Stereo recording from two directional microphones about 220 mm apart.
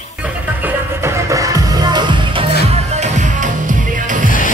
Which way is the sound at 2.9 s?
35° right (ahead or behind).